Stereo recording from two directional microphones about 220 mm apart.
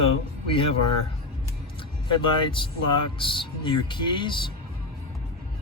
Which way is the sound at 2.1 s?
20° left (ahead or behind).